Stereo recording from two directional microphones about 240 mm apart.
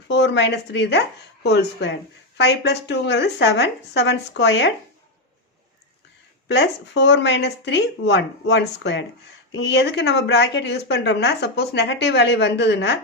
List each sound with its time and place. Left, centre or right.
0.1 s speech: left
6.5 s speech: left